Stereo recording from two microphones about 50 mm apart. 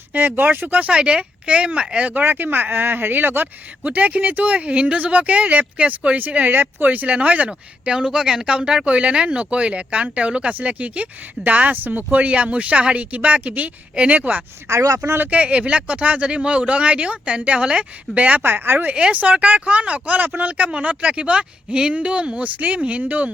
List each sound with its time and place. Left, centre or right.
0.1 s speech: right
0.8 s speech: right
14.7 s speech: right
15.3 s speech: right
18.4 s speech: right
18.9 s speech: right